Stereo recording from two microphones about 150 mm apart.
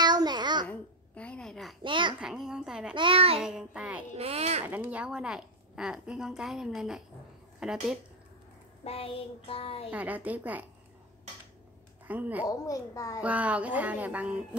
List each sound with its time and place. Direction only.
0.0 s babbling: 30° right (ahead or behind)
0.7 s a sound: 10° left (ahead or behind)
1.8 s a child's voice: 30° right (ahead or behind)
2.1 s a woman's voice: 5° right (ahead or behind)
2.9 s a child's voice: 35° right (ahead or behind)
3.3 s a woman's voice: 5° right (ahead or behind)
4.2 s speech: 45° right (ahead or behind)
4.6 s a woman's voice: 10° right (ahead or behind)
8.8 s child singing: 40° left (ahead or behind)
9.8 s speech: 10° right (ahead or behind)
12.1 s speech: 10° right (ahead or behind)
12.4 s a child's voice: 25° left (ahead or behind)
13.2 s speech: 10° right (ahead or behind)